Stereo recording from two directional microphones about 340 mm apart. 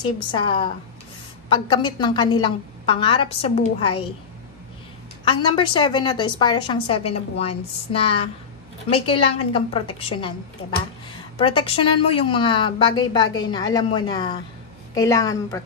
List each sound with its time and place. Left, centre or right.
0.0 s a woman's voice: centre
5.2 s a woman's voice: centre
11.3 s a woman's voice: centre